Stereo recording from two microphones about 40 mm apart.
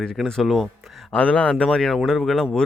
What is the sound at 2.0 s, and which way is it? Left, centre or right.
Speech, centre.